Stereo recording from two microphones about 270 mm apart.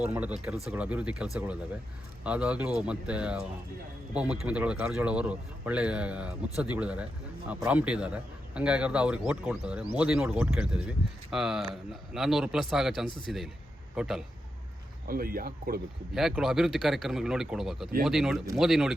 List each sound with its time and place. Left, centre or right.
0.0 s a man's voice: centre
15.0 s speech: right
16.1 s a man's voice: centre